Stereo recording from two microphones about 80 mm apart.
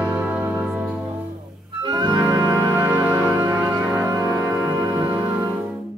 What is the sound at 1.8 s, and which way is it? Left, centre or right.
Organ, right.